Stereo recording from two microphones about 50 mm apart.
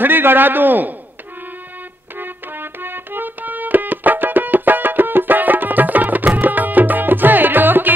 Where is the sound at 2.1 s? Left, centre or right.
Right.